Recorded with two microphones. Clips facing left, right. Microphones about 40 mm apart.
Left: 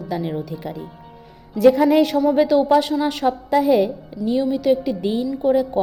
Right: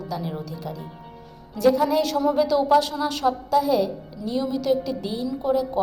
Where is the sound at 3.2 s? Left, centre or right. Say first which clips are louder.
Left 3 dB; left.